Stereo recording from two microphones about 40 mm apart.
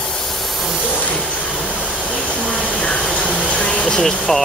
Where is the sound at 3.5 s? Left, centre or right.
Left.